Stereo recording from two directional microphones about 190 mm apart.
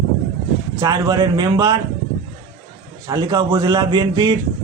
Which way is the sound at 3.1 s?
20° right (ahead or behind).